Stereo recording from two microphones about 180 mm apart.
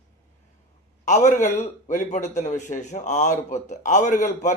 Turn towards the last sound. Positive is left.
turn(degrees=45)  # may be behind; listen again after turning